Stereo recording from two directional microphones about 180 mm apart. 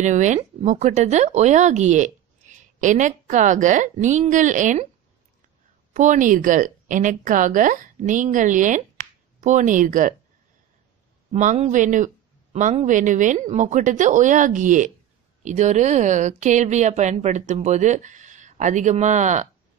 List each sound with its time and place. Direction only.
0.0 s speech: 40° right (ahead or behind)
5.9 s a woman's voice: 45° right (ahead or behind)
11.3 s a woman's voice: 40° right (ahead or behind)